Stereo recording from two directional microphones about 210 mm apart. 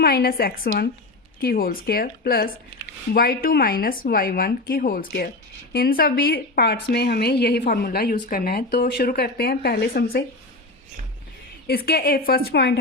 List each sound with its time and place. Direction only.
0.0 s a woman's voice: 45° left (ahead or behind)
11.7 s a woman's voice: 45° left (ahead or behind)